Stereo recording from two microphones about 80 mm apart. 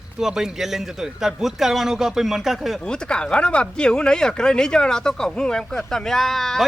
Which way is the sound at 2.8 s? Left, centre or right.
Centre.